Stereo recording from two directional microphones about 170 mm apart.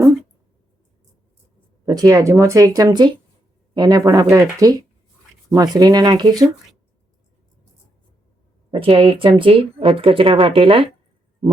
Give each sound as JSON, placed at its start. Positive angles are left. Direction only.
{"t": 1.9, "sound": "speech", "side_deg": -20}
{"t": 8.7, "sound": "speech", "side_deg": -30}